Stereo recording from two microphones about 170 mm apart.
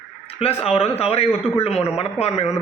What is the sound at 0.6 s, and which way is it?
Speech, 35° left (ahead or behind).